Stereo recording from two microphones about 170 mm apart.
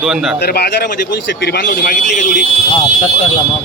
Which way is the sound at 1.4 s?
90° left.